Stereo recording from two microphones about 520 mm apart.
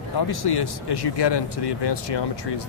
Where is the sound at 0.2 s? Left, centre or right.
Left.